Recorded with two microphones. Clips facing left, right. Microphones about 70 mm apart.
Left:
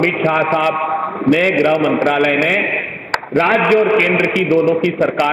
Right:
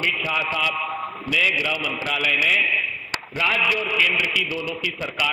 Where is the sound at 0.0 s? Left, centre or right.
Left.